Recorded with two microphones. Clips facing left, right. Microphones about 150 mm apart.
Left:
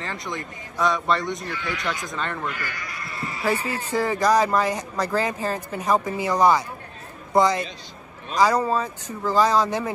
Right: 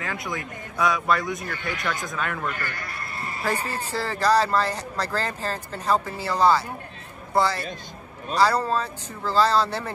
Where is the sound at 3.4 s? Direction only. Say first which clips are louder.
Left 3 dB; 10° left (ahead or behind).